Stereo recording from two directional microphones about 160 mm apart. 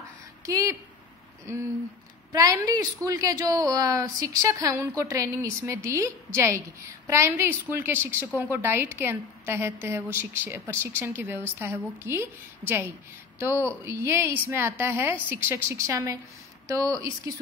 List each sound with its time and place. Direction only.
0.5 s a woman's voice: 20° right (ahead or behind)